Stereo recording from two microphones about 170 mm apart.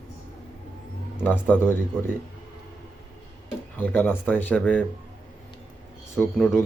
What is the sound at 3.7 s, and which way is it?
A man's voice, 10° left (ahead or behind).